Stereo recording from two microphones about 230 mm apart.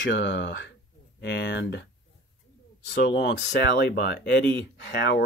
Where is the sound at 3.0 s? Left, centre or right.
Left.